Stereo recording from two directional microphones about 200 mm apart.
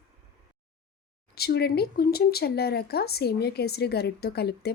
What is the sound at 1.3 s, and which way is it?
Speech, 50° left (ahead or behind).